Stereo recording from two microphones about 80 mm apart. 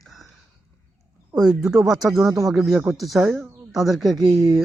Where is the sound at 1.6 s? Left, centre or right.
Centre.